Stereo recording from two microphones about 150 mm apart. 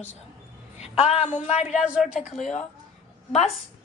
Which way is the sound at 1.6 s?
5° right (ahead or behind).